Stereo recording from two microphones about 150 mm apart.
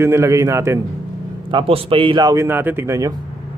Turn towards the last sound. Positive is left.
turn(degrees=-20)  # may be behind; listen again after turning